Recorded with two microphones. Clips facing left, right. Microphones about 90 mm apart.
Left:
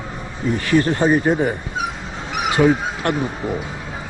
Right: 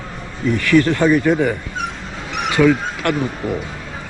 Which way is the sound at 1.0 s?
90° right.